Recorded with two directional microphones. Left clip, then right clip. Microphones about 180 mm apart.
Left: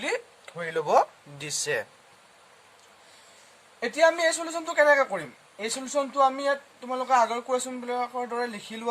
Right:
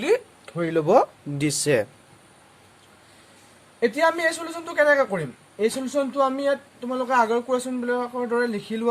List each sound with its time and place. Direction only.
0.4 s speech: 10° right (ahead or behind)
1.4 s speech: 25° right (ahead or behind)
3.8 s speech: 15° right (ahead or behind)